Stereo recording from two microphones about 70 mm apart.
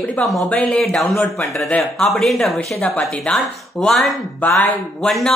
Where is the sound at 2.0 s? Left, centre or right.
Centre.